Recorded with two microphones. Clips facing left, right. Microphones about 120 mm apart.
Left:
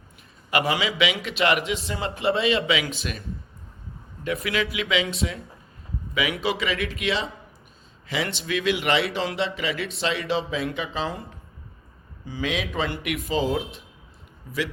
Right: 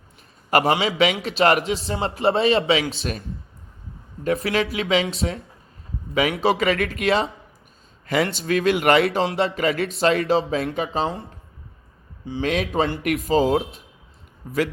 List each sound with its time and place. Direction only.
0.6 s a man's voice: 35° right (ahead or behind)
12.5 s speech: 40° right (ahead or behind)